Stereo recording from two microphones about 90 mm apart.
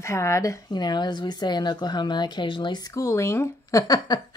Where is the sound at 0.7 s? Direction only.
55° left (ahead or behind).